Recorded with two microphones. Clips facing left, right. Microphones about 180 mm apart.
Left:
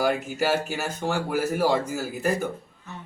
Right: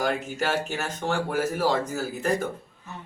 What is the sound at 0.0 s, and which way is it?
Speech, 10° left (ahead or behind).